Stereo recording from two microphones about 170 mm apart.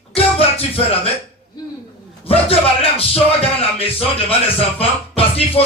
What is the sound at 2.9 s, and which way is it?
Speech, 35° left (ahead or behind).